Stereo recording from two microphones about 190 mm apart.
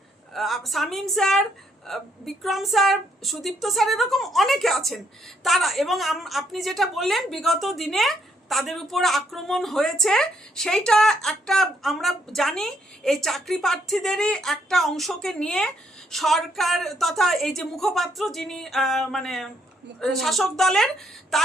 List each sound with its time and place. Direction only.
0.3 s a woman's voice: centre (ahead or behind)